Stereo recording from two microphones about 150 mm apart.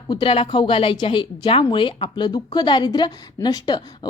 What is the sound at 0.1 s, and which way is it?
Speech, 35° left (ahead or behind).